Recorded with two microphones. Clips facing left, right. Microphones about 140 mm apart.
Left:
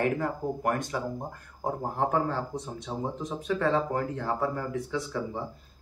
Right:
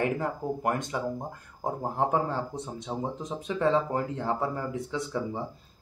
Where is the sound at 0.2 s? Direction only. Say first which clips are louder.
Even; 20° right (ahead or behind).